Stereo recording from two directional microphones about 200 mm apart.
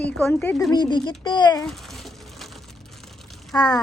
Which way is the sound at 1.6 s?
Centre (ahead or behind).